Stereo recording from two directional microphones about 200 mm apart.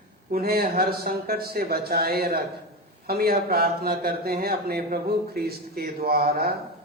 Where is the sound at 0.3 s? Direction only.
50° right (ahead or behind).